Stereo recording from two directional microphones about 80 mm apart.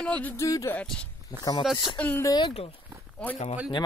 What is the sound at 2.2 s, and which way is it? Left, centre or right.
Speech, left.